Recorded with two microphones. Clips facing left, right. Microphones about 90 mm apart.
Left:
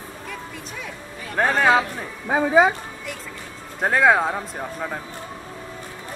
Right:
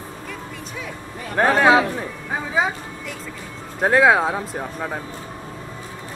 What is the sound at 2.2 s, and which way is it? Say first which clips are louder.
Speech: left 7 dB; 60° left (ahead or behind).